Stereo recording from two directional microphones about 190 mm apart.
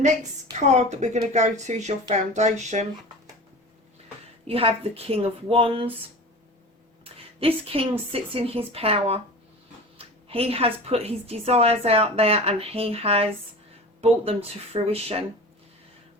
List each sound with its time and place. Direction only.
0.5 s a woman's voice: 35° right (ahead or behind)
4.4 s a woman's voice: 30° right (ahead or behind)
7.0 s a woman's voice: 30° right (ahead or behind)